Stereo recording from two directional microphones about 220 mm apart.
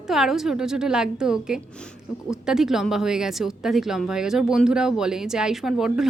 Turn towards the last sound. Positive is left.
turn(degrees=0)  # may be behind; listen again after turning